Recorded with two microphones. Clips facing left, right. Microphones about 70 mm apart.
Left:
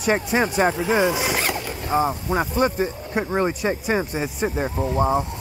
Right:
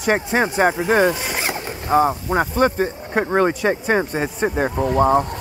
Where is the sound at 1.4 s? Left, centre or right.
Right.